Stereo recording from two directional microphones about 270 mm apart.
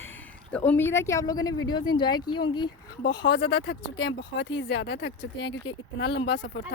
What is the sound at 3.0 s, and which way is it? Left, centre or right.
Speech, left.